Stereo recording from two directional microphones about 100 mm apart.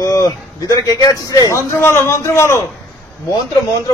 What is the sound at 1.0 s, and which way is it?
A man's voice, 35° left (ahead or behind).